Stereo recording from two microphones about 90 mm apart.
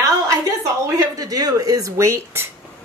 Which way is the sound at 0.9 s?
40° right (ahead or behind).